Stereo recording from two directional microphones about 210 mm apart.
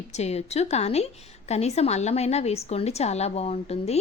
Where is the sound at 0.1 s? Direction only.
30° left (ahead or behind).